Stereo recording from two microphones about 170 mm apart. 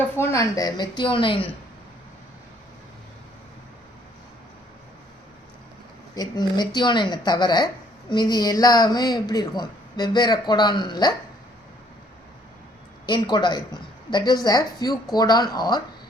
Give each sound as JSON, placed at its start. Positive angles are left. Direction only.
{"t": 0.2, "sound": "speech", "side_deg": 15}
{"t": 6.1, "sound": "speech", "side_deg": 25}
{"t": 13.1, "sound": "speech", "side_deg": 25}